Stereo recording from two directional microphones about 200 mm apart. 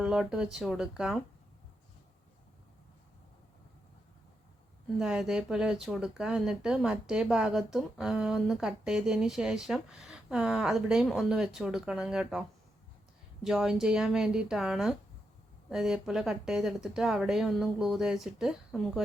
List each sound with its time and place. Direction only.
0.0 s speech: 5° right (ahead or behind)
4.9 s speech: centre (ahead or behind)